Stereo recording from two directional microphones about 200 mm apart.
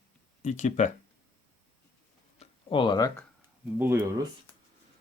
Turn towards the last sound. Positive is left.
turn(degrees=-10)  # may be behind; listen again after turning